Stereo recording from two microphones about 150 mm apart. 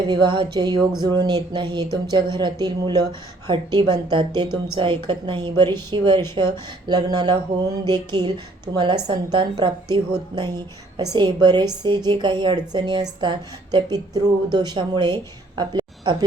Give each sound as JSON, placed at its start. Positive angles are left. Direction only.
{"t": 0.1, "sound": "a woman's voice", "side_deg": -30}